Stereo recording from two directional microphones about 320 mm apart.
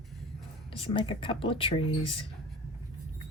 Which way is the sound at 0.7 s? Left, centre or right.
Centre.